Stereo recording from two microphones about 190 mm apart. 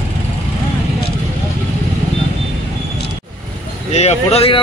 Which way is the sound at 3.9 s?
35° left (ahead or behind).